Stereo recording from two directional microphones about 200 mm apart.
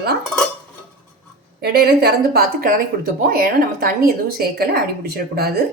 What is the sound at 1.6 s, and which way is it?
A woman's voice, 55° right (ahead or behind).